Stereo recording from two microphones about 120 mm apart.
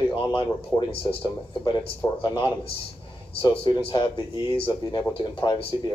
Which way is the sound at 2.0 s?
25° left (ahead or behind).